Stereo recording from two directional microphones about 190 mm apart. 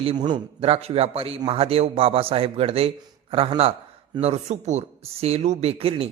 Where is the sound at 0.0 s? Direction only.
25° right (ahead or behind).